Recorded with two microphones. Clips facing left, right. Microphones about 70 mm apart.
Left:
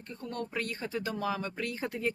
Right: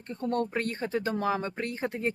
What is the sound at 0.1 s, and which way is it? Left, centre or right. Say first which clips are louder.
Speech: right 8 dB; right.